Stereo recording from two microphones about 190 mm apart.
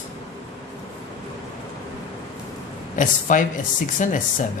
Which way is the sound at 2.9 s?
45° left (ahead or behind).